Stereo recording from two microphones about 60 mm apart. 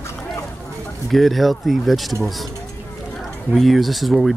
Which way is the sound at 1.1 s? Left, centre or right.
Centre.